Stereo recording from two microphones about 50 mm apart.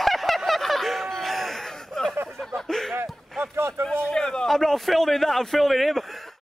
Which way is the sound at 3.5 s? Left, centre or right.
Right.